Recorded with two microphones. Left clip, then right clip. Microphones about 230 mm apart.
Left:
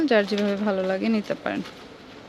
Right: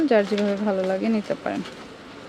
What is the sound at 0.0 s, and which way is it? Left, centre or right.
Speech, centre.